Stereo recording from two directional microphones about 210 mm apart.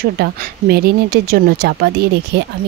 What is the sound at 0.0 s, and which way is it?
Speech, 45° right (ahead or behind).